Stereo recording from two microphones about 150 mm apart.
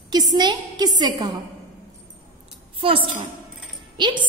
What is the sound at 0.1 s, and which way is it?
A woman's voice, 30° right (ahead or behind).